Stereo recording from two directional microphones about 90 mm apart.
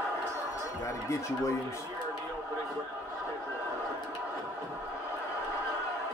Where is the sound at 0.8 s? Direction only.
35° left (ahead or behind).